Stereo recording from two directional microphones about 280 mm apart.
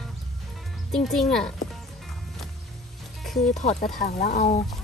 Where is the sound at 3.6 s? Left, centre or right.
Left.